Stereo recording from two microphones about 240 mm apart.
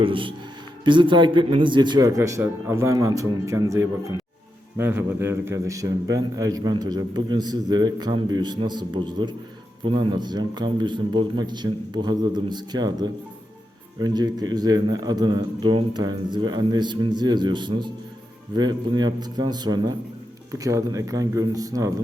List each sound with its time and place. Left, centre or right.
0.0 s a man's voice: right